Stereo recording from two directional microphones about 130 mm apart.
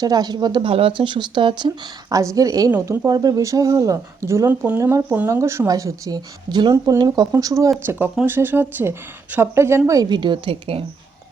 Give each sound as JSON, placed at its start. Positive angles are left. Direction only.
{"t": 0.0, "sound": "speech", "side_deg": -30}
{"t": 0.7, "sound": "speech", "side_deg": -45}
{"t": 7.9, "sound": "speech", "side_deg": -15}